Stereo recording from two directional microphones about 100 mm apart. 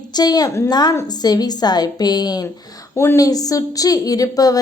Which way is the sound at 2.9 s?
25° left (ahead or behind).